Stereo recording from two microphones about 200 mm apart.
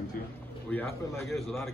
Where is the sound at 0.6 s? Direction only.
10° left (ahead or behind).